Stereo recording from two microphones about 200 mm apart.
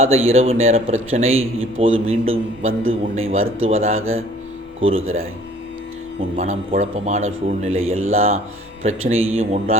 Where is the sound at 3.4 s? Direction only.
85° right.